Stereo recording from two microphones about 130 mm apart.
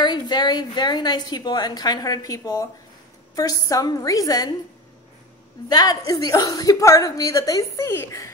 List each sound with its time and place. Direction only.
0.0 s a woman's voice: 35° left (ahead or behind)
5.7 s a woman's voice: 30° left (ahead or behind)